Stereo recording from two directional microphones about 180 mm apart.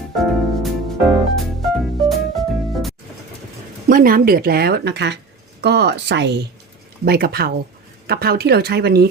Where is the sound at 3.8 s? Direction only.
50° right (ahead or behind); by 6.4 s 70° right (ahead or behind).